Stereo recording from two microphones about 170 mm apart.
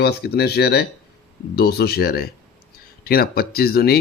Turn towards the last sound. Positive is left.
turn(degrees=65)  # may be behind; listen again after turning